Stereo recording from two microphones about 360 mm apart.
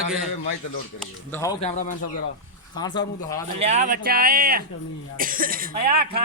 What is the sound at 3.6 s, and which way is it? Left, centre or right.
Speech, centre.